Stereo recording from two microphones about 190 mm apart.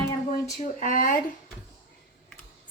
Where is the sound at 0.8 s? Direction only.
45° left (ahead or behind).